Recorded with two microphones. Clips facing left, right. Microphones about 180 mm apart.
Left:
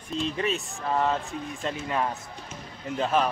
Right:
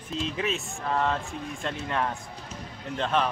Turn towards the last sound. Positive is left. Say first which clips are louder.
# left 2 dB
turn(degrees=5)  # may be behind; listen again after turning